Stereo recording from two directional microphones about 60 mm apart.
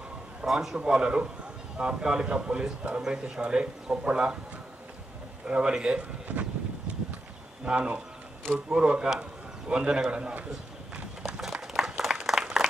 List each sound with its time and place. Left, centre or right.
0.4 s a man's voice: centre
0.7 s a man's voice: centre
5.5 s a man's voice: centre
7.6 s a man's voice: centre
11.3 s a sound: centre
12.1 s applause: centre